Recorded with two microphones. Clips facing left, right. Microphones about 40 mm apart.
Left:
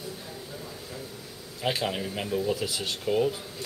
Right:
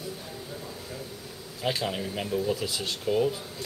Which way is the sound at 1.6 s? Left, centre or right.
Centre.